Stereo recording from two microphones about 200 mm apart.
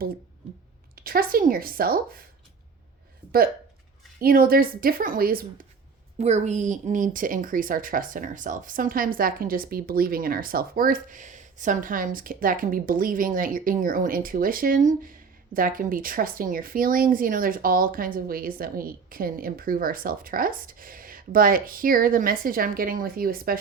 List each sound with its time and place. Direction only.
0.9 s a woman's voice: 45° right (ahead or behind)
4.2 s a woman's voice: 45° right (ahead or behind)
6.1 s a woman's voice: 35° right (ahead or behind)